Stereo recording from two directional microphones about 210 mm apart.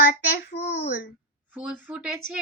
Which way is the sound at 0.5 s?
30° left (ahead or behind).